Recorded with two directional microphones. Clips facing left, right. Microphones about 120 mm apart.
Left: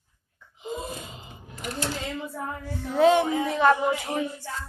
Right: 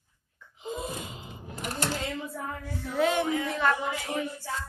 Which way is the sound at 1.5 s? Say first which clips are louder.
Left 1 dB; 45° right (ahead or behind).